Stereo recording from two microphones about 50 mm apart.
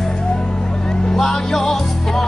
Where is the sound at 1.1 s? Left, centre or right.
Centre.